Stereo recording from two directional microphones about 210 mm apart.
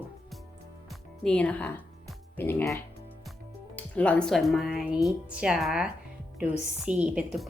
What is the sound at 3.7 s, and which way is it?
A woman's voice, 5° left (ahead or behind).